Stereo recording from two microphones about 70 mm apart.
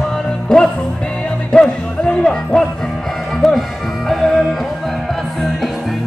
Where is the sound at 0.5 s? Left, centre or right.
Centre.